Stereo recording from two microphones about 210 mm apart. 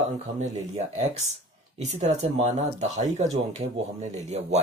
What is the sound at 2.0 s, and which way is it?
Speech, 30° right (ahead or behind).